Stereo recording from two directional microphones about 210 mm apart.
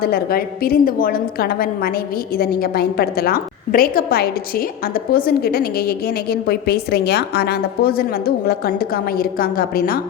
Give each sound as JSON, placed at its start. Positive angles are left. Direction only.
{"t": 0.0, "sound": "a woman's voice", "side_deg": 45}